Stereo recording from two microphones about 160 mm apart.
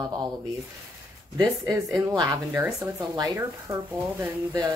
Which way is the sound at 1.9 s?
20° right (ahead or behind).